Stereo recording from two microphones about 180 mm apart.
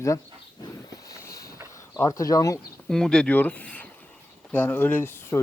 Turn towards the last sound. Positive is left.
turn(degrees=10)  # may be behind; listen again after turning